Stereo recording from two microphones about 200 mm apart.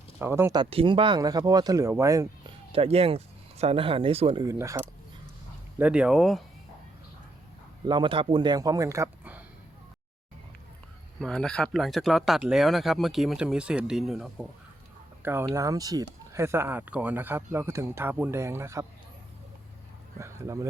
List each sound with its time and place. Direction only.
0.2 s speech: 10° right (ahead or behind)
2.7 s speech: 30° right (ahead or behind)
4.4 s speech: 15° right (ahead or behind)
7.9 s speech: 25° right (ahead or behind)
11.2 s speech: 5° left (ahead or behind); by 18.9 s 15° right (ahead or behind)
20.1 s speech: 15° right (ahead or behind)